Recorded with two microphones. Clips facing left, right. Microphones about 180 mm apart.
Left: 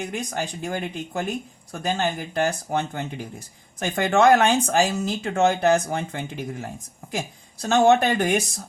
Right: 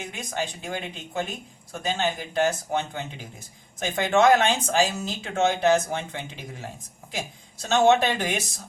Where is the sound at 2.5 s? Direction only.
55° left (ahead or behind).